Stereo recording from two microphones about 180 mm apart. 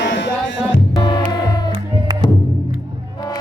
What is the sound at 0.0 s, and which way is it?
Music, 80° left.